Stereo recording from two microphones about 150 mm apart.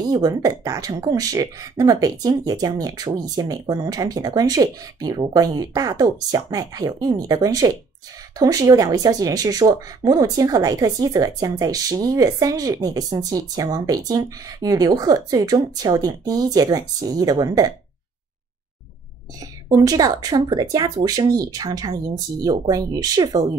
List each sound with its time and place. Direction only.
0.0 s speech: 25° right (ahead or behind)
19.4 s speech: 25° right (ahead or behind)